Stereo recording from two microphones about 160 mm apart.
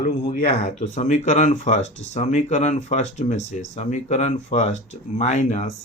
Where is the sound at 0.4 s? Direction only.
45° left (ahead or behind).